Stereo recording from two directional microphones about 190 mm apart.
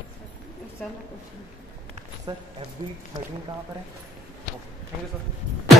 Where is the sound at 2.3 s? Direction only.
25° right (ahead or behind).